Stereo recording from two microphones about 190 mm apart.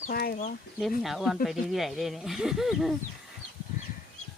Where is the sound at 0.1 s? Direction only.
50° left (ahead or behind).